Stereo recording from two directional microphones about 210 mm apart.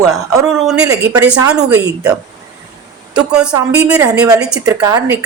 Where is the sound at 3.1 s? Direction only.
5° right (ahead or behind).